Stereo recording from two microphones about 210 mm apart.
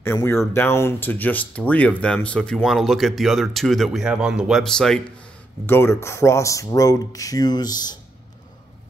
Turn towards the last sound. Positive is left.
turn(degrees=20)  # may be behind; listen again after turning